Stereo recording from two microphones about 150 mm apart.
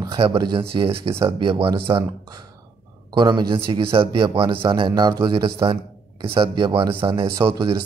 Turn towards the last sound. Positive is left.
turn(degrees=-30)  # may be behind; listen again after turning